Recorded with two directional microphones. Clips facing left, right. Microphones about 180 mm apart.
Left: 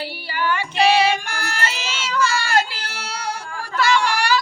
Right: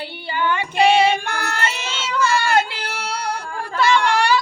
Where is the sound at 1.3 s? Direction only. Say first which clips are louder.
Right 2 dB; 60° right (ahead or behind).